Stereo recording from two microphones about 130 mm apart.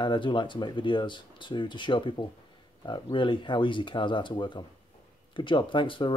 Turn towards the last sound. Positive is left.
turn(degrees=40)  # may be behind; listen again after turning